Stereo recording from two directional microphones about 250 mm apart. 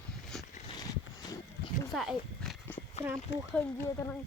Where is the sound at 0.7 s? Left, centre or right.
Centre.